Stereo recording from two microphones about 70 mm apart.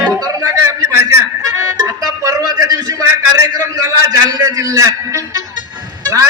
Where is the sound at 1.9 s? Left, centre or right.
Right.